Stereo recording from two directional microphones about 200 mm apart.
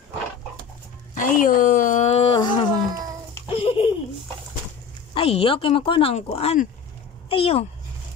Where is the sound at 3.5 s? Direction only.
25° left (ahead or behind).